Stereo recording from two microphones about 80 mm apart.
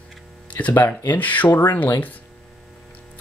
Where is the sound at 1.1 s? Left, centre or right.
Left.